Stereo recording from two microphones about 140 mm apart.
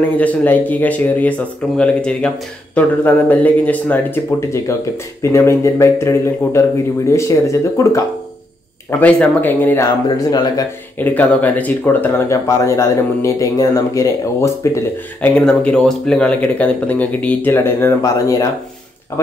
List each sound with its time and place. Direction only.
0.2 s speech: 10° left (ahead or behind)
9.0 s speech: 10° left (ahead or behind)
9.8 s speech: 25° left (ahead or behind)
11.0 s speech: 10° left (ahead or behind)
15.2 s speech: 5° left (ahead or behind); by 18.5 s 25° left (ahead or behind)